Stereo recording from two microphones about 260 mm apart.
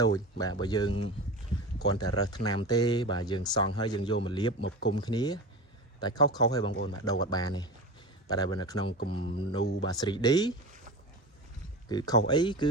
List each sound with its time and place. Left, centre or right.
0.0 s speech: centre
6.7 s speech: left
7.0 s speech: centre
11.9 s speech: centre